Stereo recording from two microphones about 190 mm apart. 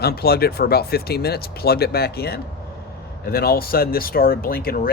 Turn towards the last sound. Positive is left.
turn(degrees=50)  # may be behind; listen again after turning